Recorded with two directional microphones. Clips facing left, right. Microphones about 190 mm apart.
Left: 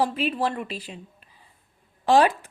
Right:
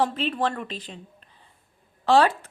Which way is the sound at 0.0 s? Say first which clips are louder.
Even; 10° left (ahead or behind).